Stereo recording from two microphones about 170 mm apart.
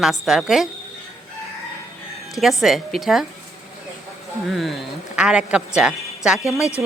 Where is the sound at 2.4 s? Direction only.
Centre (ahead or behind).